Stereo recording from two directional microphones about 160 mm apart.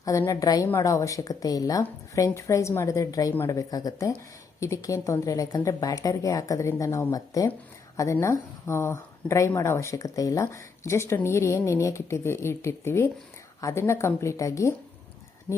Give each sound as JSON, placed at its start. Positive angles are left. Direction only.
{"t": 0.0, "sound": "a woman's voice", "side_deg": 20}